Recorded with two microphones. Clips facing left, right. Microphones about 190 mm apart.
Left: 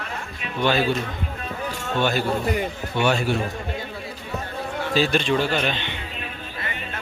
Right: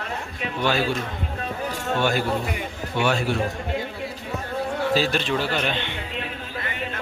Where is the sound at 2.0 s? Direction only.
10° right (ahead or behind).